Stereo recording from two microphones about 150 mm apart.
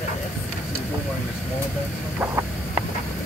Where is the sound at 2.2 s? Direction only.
15° right (ahead or behind).